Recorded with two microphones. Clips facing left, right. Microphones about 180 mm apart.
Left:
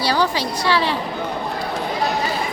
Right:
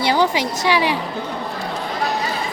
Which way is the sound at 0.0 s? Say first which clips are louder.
Right 2 dB; 20° right (ahead or behind).